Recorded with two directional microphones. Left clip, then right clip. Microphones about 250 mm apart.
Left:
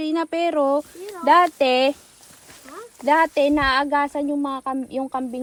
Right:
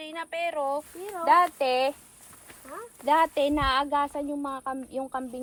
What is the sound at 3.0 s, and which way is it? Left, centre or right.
A woman's voice, left.